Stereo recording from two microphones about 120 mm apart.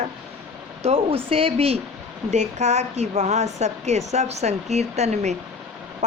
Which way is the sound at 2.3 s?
70° right (ahead or behind).